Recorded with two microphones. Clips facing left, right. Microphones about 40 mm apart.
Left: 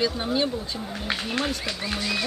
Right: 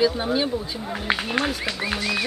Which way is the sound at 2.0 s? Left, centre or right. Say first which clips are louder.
Even; centre.